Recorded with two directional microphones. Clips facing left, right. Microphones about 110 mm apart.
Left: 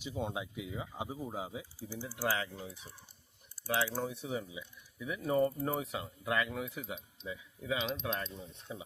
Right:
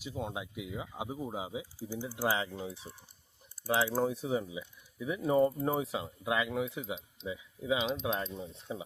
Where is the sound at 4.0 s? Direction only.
35° right (ahead or behind).